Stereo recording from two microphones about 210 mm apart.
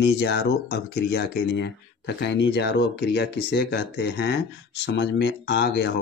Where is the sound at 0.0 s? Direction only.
55° left (ahead or behind).